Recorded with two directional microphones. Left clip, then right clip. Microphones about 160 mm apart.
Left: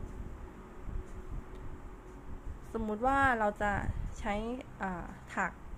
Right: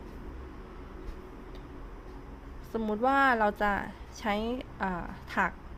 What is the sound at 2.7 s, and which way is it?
A woman's voice, 20° right (ahead or behind).